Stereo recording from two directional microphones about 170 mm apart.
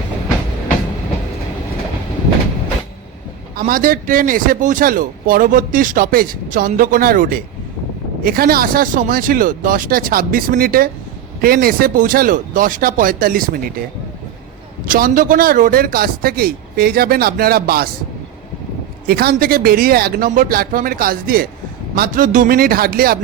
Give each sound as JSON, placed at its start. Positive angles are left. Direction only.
{"t": 3.5, "sound": "a man's voice", "side_deg": -55}
{"t": 14.8, "sound": "a man's voice", "side_deg": -55}
{"t": 19.0, "sound": "a man's voice", "side_deg": -65}